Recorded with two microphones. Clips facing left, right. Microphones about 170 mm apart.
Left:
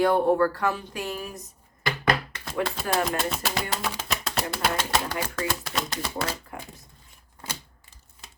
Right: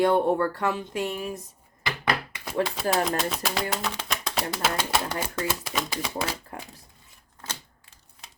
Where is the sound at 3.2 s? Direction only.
Centre (ahead or behind).